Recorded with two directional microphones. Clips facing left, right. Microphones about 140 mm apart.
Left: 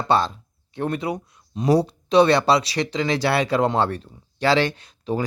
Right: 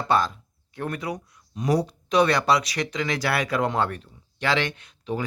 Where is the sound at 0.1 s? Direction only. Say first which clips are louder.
Left 2 dB; 30° left (ahead or behind).